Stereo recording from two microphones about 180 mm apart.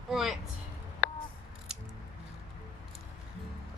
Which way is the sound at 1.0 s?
55° left (ahead or behind).